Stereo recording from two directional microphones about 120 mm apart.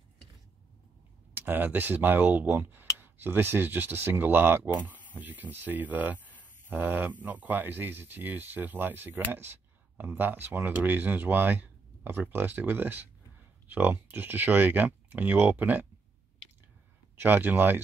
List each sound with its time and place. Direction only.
1.3 s speech: 15° right (ahead or behind)
17.2 s speech: 15° right (ahead or behind)